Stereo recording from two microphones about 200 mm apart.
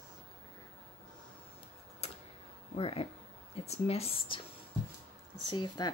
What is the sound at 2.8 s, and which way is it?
Speech, 30° left (ahead or behind).